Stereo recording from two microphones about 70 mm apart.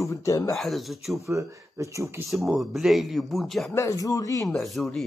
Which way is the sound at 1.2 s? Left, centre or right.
Right.